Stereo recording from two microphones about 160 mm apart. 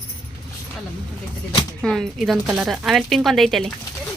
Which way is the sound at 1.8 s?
Centre (ahead or behind).